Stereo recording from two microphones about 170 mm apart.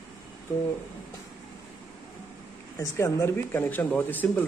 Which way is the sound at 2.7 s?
15° left (ahead or behind).